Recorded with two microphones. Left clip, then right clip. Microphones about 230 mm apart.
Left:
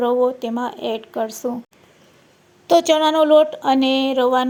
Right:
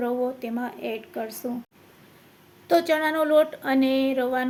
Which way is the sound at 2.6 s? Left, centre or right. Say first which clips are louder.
Left 7 dB; left.